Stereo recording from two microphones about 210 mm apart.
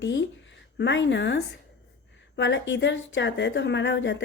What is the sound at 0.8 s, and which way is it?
A woman's voice, 60° left (ahead or behind).